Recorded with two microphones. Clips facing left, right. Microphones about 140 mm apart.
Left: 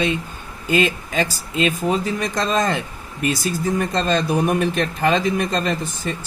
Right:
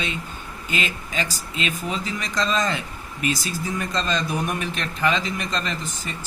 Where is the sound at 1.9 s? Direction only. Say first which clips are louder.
Left 8 dB; 55° left (ahead or behind).